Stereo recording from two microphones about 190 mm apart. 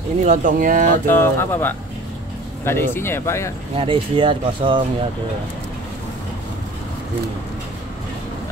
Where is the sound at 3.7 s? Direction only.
25° right (ahead or behind).